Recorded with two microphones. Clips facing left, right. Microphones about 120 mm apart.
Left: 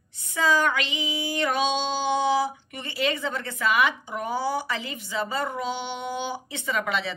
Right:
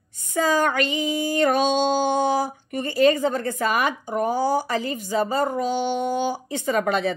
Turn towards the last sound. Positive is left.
turn(degrees=-45)  # may be behind; listen again after turning